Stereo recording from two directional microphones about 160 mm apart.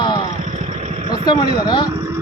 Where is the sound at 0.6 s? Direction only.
40° right (ahead or behind).